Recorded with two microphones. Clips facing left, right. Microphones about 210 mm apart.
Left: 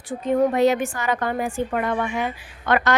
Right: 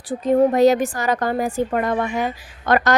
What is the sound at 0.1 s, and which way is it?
A woman's voice, 35° right (ahead or behind).